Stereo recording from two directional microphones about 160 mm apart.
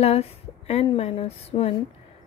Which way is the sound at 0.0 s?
40° left (ahead or behind).